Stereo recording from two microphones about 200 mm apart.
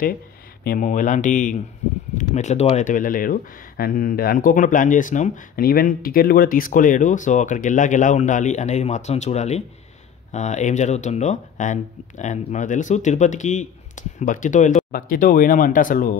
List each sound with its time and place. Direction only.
0.7 s speech: 40° left (ahead or behind)